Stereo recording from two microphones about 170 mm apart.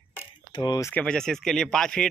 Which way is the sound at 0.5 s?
25° left (ahead or behind).